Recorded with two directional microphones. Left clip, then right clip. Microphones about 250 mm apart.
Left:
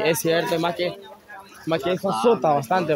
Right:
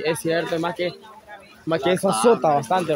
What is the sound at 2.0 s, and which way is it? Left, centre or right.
Speech, centre.